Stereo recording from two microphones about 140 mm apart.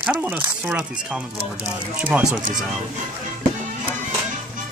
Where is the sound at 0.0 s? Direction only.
10° right (ahead or behind).